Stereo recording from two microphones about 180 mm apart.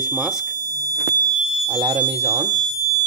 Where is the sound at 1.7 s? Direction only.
30° right (ahead or behind).